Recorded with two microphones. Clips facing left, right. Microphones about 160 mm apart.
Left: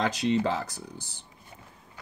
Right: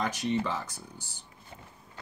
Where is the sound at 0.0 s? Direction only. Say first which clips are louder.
Left 4 dB; 80° left.